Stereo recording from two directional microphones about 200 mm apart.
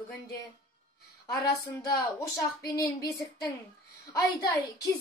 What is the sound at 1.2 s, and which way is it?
A woman's voice, 15° left (ahead or behind).